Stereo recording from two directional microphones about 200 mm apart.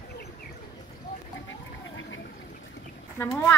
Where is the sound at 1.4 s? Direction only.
75° left (ahead or behind).